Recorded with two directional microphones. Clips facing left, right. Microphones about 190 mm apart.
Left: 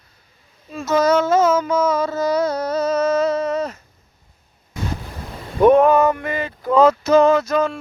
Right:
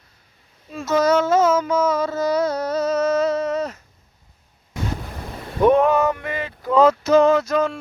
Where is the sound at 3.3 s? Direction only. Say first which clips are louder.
Left 1 dB; 30° left (ahead or behind).